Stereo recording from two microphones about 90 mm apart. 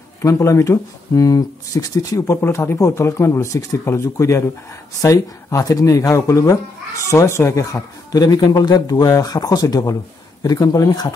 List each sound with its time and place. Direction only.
0.2 s speech: 35° left (ahead or behind)
2.4 s speech: 30° left (ahead or behind)